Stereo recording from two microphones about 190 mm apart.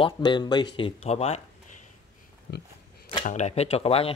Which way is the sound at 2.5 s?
60° left (ahead or behind).